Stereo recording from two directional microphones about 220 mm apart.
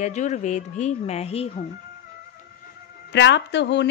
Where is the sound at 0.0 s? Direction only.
35° left (ahead or behind).